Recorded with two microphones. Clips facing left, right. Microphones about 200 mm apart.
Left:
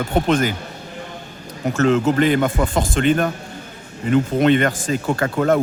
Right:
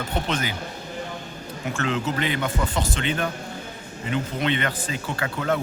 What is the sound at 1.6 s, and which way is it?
Speech, 40° left (ahead or behind).